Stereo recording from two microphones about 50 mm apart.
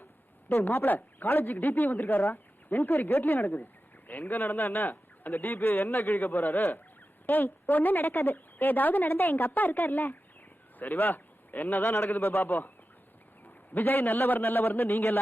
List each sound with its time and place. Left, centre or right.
0.4 s a man's voice: left
13.7 s a man's voice: left